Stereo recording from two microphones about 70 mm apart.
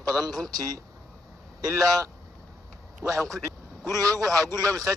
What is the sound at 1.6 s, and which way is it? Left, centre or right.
A man's voice, right.